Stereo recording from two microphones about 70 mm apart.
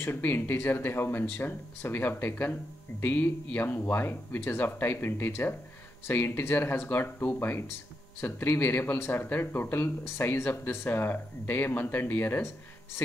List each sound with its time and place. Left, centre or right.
0.0 s speech: left